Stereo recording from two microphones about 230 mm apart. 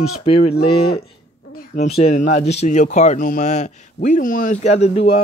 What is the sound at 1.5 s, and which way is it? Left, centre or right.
Speech, left.